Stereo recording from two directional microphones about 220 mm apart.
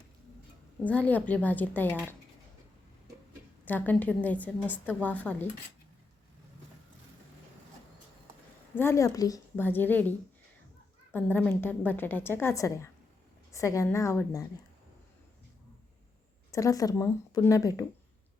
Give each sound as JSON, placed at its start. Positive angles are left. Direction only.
{"t": 0.9, "sound": "a woman's voice", "side_deg": 5}
{"t": 3.7, "sound": "a woman's voice", "side_deg": 5}
{"t": 8.7, "sound": "a woman's voice", "side_deg": 10}
{"t": 16.5, "sound": "a woman's voice", "side_deg": 15}